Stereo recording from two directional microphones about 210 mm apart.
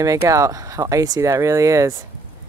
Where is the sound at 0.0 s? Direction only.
15° right (ahead or behind).